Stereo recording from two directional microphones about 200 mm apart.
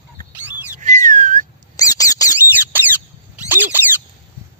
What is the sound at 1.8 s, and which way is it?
Squeak, 20° left (ahead or behind).